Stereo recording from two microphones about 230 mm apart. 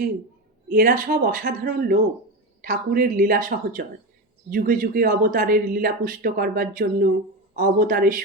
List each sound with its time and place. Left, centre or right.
0.7 s speech: right